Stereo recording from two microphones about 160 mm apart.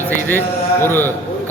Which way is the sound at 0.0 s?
10° left (ahead or behind).